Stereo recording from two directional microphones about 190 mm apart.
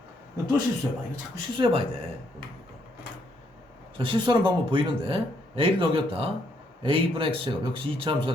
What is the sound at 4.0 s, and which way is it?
Speech, 25° right (ahead or behind).